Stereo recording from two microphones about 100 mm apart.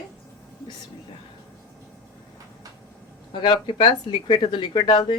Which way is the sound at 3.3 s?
55° left (ahead or behind).